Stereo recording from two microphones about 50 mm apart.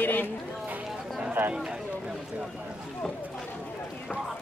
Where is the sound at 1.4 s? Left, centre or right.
Right.